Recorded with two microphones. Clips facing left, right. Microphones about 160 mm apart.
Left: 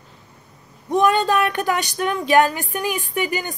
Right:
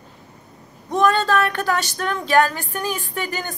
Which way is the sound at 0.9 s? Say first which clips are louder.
Left 1 dB; 15° left (ahead or behind).